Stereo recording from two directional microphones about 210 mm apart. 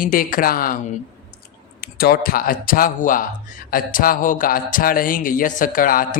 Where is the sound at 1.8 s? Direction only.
45° left (ahead or behind).